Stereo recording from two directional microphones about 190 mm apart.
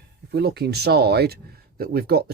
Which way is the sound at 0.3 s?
60° right (ahead or behind).